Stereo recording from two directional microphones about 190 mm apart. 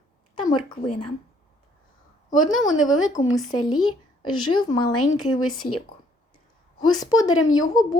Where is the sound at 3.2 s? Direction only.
40° left (ahead or behind).